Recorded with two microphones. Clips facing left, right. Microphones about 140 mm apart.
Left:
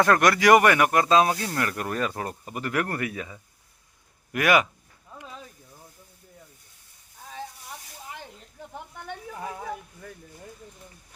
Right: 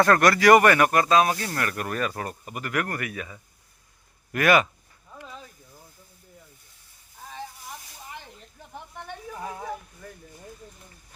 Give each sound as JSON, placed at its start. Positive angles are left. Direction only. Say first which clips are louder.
{"t": 0.0, "sound": "speech", "louder": "right 1 dB", "side_deg": 15}